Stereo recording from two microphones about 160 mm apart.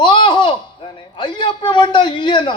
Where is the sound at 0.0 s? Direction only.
30° left (ahead or behind).